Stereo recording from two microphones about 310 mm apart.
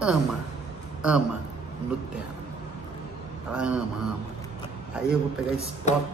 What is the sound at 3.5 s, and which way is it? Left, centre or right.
Speech, centre.